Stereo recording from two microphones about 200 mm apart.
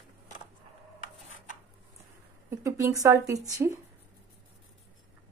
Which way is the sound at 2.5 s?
15° right (ahead or behind).